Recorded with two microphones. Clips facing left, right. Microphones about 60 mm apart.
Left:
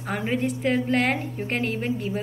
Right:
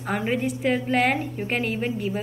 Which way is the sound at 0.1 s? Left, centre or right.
Centre.